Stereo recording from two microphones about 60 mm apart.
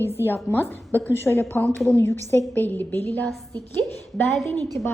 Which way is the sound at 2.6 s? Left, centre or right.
Left.